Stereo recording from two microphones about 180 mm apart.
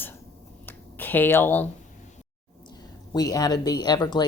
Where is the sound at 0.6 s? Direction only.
10° left (ahead or behind).